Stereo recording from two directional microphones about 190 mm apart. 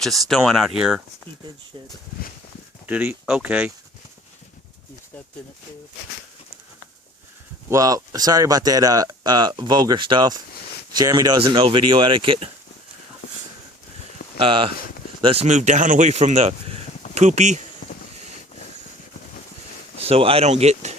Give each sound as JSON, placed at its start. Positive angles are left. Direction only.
{"t": 0.0, "sound": "speech", "side_deg": 0}
{"t": 2.8, "sound": "speech", "side_deg": -10}
{"t": 7.7, "sound": "speech", "side_deg": -20}
{"t": 14.3, "sound": "speech", "side_deg": -30}
{"t": 17.8, "sound": "a sound", "side_deg": 45}
{"t": 20.0, "sound": "speech", "side_deg": -30}